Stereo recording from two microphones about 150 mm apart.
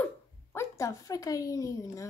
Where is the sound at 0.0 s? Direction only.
15° left (ahead or behind).